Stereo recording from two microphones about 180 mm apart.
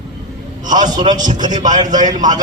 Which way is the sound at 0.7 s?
25° right (ahead or behind).